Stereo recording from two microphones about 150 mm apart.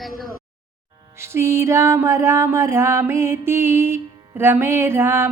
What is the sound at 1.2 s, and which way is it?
Mantra, 15° right (ahead or behind).